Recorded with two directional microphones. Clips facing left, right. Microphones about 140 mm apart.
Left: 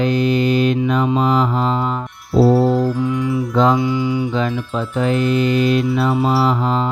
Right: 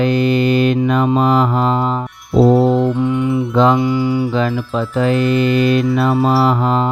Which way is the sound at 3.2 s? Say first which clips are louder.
Right 2 dB; 60° right (ahead or behind).